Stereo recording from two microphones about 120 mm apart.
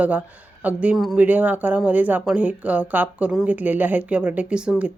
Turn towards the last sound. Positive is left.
turn(degrees=-10)  # may be behind; listen again after turning